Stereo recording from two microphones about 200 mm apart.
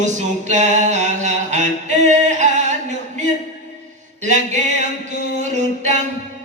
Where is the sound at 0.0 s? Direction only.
35° right (ahead or behind).